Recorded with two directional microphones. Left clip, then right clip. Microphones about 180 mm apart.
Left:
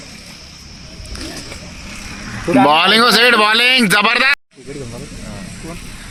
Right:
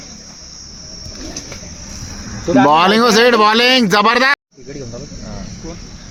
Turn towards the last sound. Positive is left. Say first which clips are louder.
# right 1 dB
turn(degrees=-15)  # may be behind; listen again after turning